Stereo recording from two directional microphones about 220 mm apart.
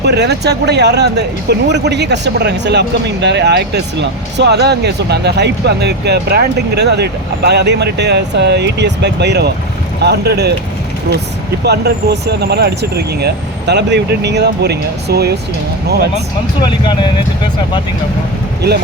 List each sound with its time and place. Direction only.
0.0 s speech: 50° right (ahead or behind)
11.6 s speech: 50° right (ahead or behind)
16.6 s speech: 20° left (ahead or behind)